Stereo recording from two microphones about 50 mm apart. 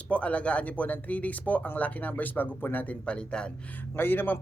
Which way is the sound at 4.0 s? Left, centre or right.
Left.